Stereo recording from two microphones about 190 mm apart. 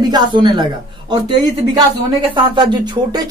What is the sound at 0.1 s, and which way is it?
Speech, 25° right (ahead or behind).